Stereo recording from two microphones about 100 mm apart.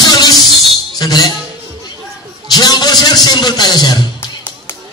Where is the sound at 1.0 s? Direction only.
40° left (ahead or behind).